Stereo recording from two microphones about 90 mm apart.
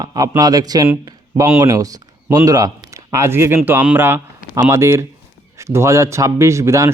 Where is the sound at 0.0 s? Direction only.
45° right (ahead or behind).